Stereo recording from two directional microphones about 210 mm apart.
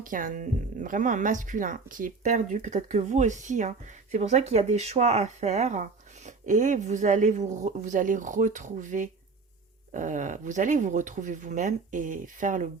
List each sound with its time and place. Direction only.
0.0 s speech: 40° right (ahead or behind)